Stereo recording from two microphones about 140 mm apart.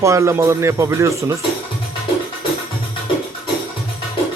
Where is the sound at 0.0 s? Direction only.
20° right (ahead or behind).